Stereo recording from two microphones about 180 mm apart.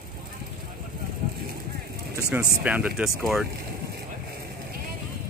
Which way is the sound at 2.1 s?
15° right (ahead or behind).